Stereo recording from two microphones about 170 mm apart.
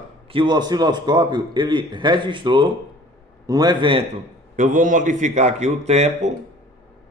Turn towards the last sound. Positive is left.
turn(degrees=-40)  # may be behind; listen again after turning